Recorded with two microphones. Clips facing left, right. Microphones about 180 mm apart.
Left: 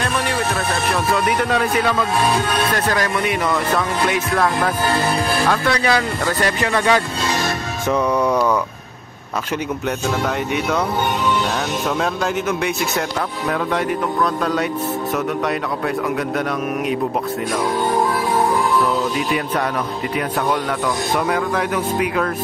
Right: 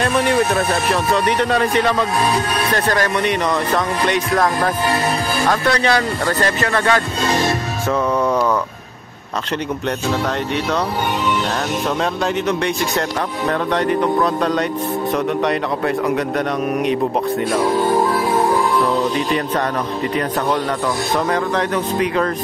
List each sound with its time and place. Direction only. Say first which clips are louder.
1.1 s speech: right 2 dB; 5° left (ahead or behind)
12.0 s speech: right 1 dB; 5° left (ahead or behind)
21.3 s speech: right 1 dB; 5° left (ahead or behind)